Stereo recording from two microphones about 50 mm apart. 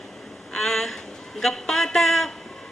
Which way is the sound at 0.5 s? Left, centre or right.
Centre.